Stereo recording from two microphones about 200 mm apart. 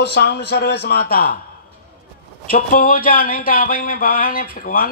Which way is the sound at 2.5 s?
45° left (ahead or behind).